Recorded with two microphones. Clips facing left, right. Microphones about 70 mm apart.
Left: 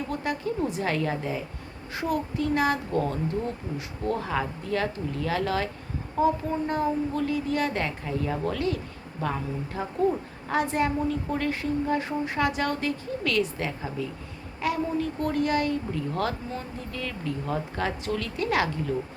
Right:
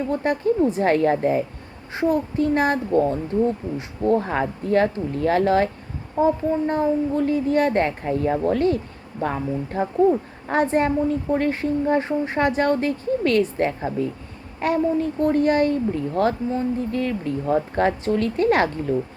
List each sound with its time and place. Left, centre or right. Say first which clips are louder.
0.1 s a woman's voice: right 10 dB; right